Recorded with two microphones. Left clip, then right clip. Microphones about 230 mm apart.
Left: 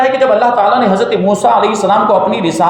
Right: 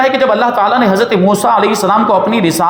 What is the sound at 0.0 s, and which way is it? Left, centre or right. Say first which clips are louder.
Speech: left 1 dB; right.